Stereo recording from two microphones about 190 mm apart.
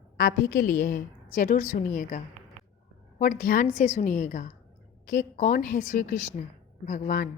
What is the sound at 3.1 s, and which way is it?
A woman's voice, 40° left (ahead or behind).